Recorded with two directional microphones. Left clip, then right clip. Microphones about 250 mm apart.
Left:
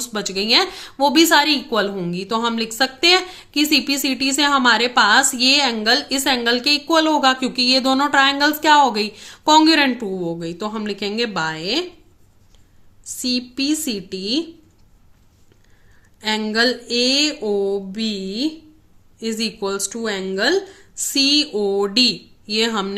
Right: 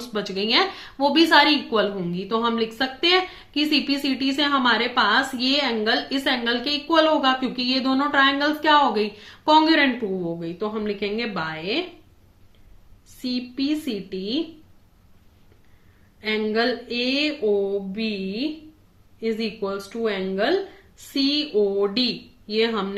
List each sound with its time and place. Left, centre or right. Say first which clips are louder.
0.0 s a woman's voice: left 3 dB; left
13.2 s speech: left 5 dB; left
16.2 s speech: left 4 dB; left